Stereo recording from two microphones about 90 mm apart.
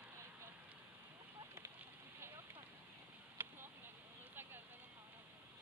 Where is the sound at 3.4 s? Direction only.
25° right (ahead or behind).